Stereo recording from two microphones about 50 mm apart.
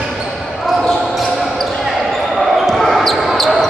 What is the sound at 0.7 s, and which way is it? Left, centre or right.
Basketball bounce, centre.